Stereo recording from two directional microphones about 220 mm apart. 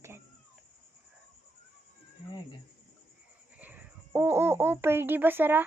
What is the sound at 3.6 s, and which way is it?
A child's voice, 10° right (ahead or behind).